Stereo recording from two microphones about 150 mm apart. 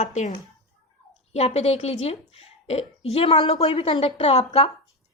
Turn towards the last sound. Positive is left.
turn(degrees=40)  # may be behind; listen again after turning